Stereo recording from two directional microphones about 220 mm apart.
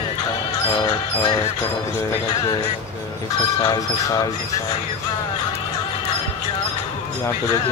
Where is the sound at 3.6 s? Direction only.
15° left (ahead or behind).